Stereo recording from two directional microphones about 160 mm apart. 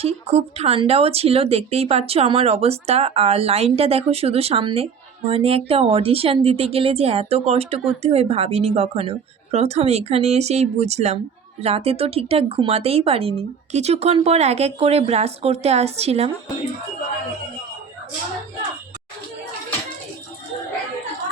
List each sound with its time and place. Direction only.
0.0 s speech: 40° right (ahead or behind)